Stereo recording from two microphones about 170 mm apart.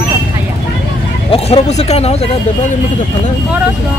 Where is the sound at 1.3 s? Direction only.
40° left (ahead or behind).